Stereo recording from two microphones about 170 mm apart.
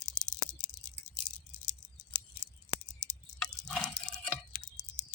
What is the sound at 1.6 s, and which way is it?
Scissors, 30° left (ahead or behind).